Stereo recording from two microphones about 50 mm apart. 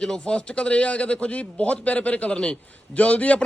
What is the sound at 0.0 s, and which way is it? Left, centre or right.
A man's voice, centre.